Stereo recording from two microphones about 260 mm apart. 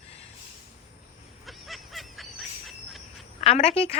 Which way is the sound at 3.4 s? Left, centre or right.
Left.